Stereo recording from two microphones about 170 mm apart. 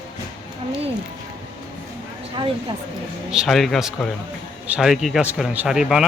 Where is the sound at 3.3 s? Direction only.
Centre (ahead or behind).